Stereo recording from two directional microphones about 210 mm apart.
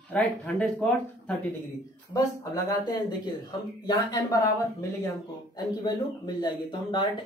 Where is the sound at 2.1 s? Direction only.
15° left (ahead or behind).